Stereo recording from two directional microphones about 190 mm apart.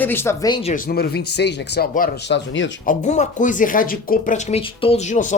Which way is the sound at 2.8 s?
45° left (ahead or behind).